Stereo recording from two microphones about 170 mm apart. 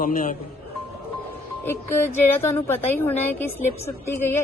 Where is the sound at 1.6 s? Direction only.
15° left (ahead or behind).